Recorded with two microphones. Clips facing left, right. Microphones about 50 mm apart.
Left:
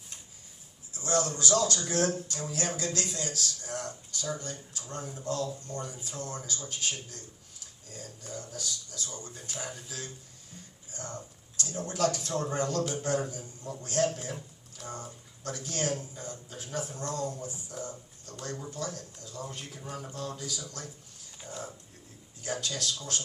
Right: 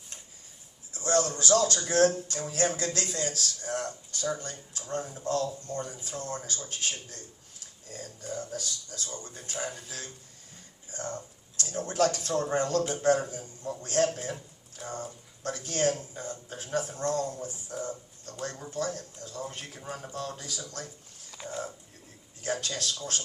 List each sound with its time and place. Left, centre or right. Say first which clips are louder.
0.9 s music: right 3 dB; right
1.3 s a man's voice: right 3 dB; right
21.4 s speech: right 5 dB; right
22.6 s a man's voice: right 1 dB; right